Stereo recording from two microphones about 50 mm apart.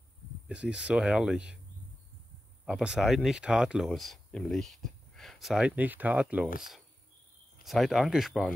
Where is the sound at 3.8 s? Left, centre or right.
Centre.